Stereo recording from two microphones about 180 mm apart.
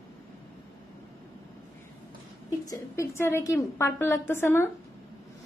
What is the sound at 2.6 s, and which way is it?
A woman's voice, 15° left (ahead or behind).